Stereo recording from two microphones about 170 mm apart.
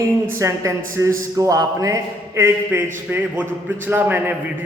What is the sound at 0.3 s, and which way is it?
A man's voice, 15° right (ahead or behind).